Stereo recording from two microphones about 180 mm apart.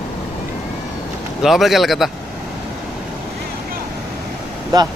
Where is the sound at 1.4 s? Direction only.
Centre (ahead or behind).